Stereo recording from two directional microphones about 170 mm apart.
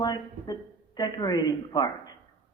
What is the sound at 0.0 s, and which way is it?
A man's voice, 25° left (ahead or behind).